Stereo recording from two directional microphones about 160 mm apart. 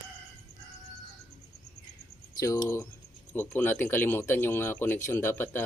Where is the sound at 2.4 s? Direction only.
20° left (ahead or behind).